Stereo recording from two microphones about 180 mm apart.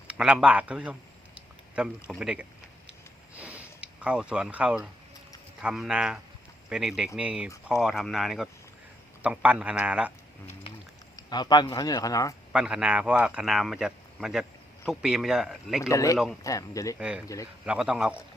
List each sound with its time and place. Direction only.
0.1 s speech: 5° right (ahead or behind)
3.3 s a sound: 5° right (ahead or behind)
5.6 s a man's voice: 5° right (ahead or behind)
11.2 s speech: 25° left (ahead or behind)
12.5 s speech: 5° right (ahead or behind)
15.9 s speech: 20° left (ahead or behind)
17.0 s speech: 5° right (ahead or behind)